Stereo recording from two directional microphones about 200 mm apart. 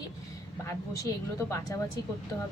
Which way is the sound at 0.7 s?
15° left (ahead or behind).